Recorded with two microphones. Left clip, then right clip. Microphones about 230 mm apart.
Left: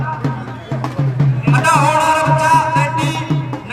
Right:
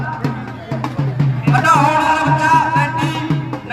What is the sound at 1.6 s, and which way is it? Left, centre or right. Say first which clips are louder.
Music: even; left.